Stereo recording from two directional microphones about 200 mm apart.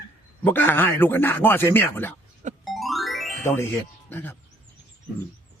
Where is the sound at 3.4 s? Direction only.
15° left (ahead or behind).